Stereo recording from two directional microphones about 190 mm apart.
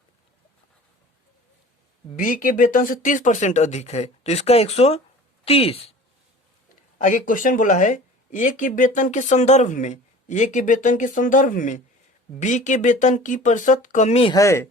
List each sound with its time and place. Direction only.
2.1 s speech: 45° left (ahead or behind); by 5.9 s 30° left (ahead or behind)
7.0 s speech: 45° left (ahead or behind)
14.3 s speech: 15° left (ahead or behind)